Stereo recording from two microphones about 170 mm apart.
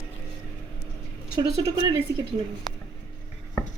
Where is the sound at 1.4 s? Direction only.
20° right (ahead or behind).